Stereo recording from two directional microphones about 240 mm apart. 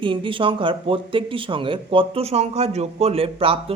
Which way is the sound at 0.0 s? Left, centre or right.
Right.